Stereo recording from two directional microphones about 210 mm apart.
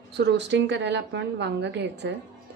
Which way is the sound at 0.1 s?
55° right (ahead or behind).